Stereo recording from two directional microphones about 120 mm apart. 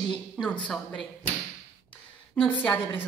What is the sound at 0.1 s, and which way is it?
Speech, 10° left (ahead or behind).